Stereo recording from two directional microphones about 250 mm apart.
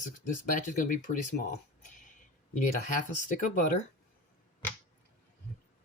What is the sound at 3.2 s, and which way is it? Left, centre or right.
Speech, left.